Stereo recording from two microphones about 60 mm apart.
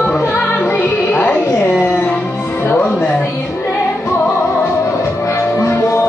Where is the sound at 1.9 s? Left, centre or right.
Left.